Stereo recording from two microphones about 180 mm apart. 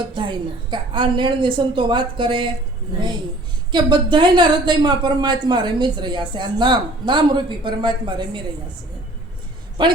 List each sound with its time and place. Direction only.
0.1 s a woman's voice: 25° right (ahead or behind)
3.7 s a woman's voice: 25° right (ahead or behind)